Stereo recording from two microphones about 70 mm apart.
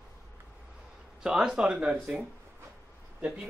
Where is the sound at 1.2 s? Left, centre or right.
Centre.